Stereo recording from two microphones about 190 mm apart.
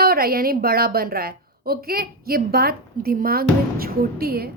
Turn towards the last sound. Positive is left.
turn(degrees=-55)  # may be behind; listen again after turning